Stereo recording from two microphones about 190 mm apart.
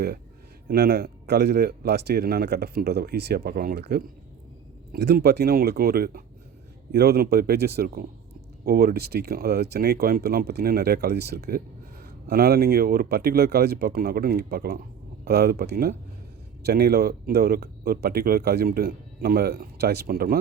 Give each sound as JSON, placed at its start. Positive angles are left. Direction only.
{"t": 0.7, "sound": "speech", "side_deg": -55}